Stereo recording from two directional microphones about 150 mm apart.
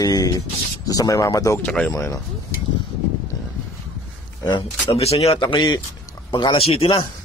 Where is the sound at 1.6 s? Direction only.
10° left (ahead or behind).